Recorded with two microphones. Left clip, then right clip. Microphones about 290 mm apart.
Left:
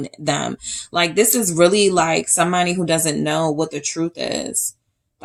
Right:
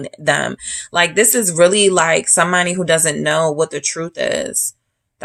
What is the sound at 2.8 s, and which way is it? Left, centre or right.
Speech, right.